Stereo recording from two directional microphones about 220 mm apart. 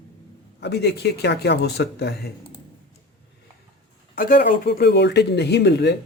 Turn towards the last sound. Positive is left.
turn(degrees=50)  # may be behind; listen again after turning